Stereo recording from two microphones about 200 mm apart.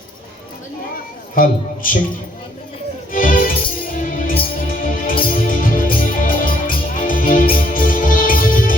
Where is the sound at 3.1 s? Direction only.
45° left (ahead or behind).